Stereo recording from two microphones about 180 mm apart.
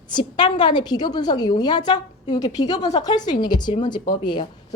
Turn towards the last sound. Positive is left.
turn(degrees=25)  # may be behind; listen again after turning